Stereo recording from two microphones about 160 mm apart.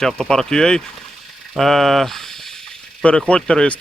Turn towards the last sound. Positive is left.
turn(degrees=5)  # may be behind; listen again after turning